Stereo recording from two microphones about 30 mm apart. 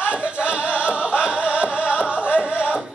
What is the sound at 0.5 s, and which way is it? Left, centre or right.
Music, right.